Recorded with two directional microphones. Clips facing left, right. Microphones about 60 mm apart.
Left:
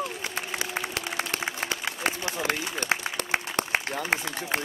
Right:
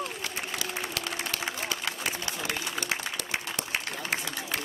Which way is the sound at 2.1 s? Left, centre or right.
Left.